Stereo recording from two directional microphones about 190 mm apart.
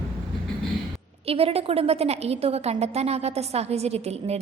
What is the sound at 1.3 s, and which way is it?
A woman's voice, 30° right (ahead or behind).